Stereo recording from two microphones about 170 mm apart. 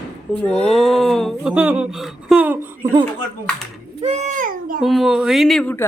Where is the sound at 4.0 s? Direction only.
40° right (ahead or behind).